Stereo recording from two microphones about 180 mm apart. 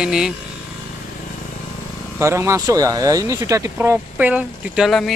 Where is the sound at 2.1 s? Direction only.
15° right (ahead or behind).